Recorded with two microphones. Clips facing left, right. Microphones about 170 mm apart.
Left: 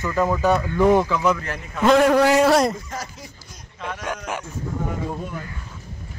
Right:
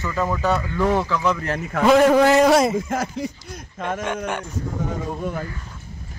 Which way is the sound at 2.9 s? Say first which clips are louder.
Right 9 dB; 55° right (ahead or behind).